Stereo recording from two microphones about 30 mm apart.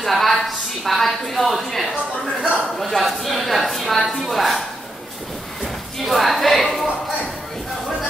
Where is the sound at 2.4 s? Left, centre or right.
Right.